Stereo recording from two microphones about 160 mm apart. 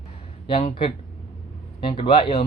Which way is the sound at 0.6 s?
40° left (ahead or behind).